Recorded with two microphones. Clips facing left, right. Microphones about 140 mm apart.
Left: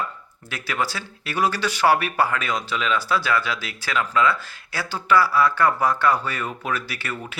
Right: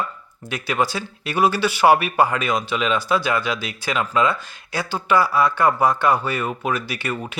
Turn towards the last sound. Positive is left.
turn(degrees=-15)  # may be behind; listen again after turning